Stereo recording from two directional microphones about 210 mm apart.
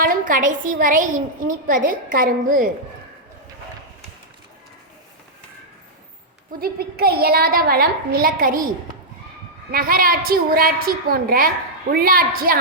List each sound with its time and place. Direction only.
0.0 s a woman's voice: 40° right (ahead or behind)
6.6 s a woman's voice: 45° right (ahead or behind)
9.7 s a woman's voice: 45° right (ahead or behind)